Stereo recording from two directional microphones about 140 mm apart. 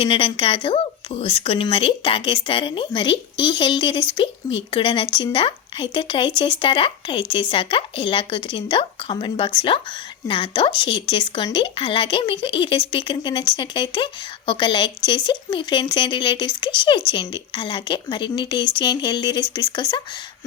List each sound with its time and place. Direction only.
0.0 s a woman's voice: 40° left (ahead or behind)